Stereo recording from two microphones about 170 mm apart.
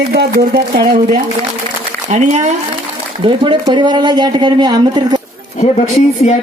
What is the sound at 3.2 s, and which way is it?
Speech, 30° right (ahead or behind).